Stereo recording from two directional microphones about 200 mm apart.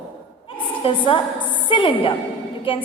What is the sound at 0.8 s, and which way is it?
A woman's voice, 25° left (ahead or behind).